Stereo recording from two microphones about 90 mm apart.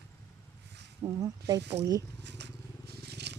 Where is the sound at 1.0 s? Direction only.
40° right (ahead or behind).